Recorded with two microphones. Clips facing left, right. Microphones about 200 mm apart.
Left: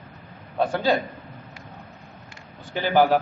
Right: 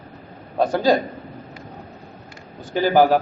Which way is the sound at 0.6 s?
40° right (ahead or behind).